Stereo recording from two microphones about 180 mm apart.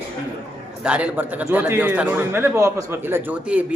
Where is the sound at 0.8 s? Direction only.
5° right (ahead or behind).